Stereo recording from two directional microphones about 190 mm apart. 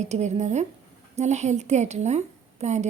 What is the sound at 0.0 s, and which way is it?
Speech, 35° right (ahead or behind).